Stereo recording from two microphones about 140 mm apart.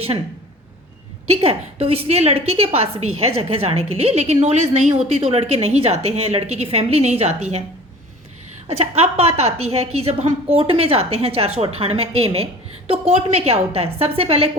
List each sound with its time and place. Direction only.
1.3 s a woman's voice: 45° right (ahead or behind)
8.6 s a woman's voice: 50° right (ahead or behind)